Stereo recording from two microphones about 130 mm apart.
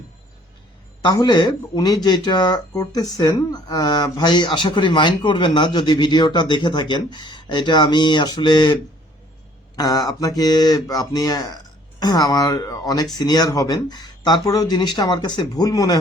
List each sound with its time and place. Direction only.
1.0 s speech: 30° left (ahead or behind)